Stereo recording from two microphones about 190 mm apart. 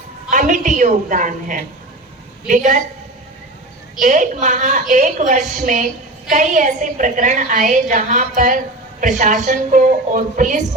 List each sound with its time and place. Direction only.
0.3 s a woman's voice: 40° right (ahead or behind)
4.0 s a woman's voice: 40° right (ahead or behind)